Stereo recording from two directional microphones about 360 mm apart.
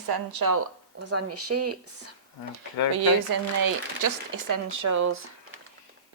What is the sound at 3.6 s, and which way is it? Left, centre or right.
Speech, right.